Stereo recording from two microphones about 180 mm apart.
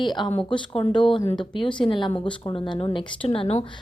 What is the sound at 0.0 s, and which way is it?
A woman's voice, 25° left (ahead or behind).